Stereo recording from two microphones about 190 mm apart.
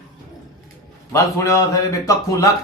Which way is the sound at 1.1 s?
15° left (ahead or behind).